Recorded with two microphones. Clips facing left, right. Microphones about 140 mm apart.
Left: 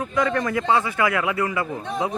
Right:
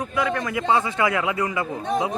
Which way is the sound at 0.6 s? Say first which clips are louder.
Right 3 dB; 25° right (ahead or behind).